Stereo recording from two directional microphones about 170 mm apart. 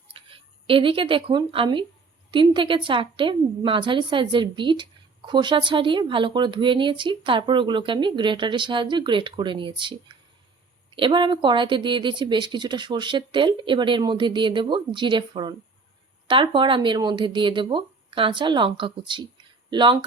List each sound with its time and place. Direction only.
0.1 s a woman's voice: 30° right (ahead or behind)